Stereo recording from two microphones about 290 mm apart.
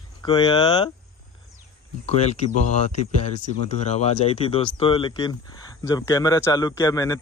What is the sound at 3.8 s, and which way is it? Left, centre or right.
Speech, left.